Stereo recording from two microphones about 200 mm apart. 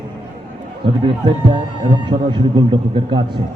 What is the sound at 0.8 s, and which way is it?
A man's voice, 25° right (ahead or behind).